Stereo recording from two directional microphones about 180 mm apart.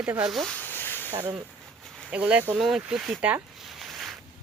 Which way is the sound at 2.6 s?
Centre (ahead or behind).